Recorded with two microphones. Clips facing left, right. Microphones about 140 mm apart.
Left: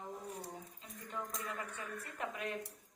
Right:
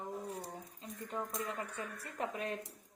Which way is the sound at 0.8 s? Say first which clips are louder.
Right 5 dB; 30° right (ahead or behind).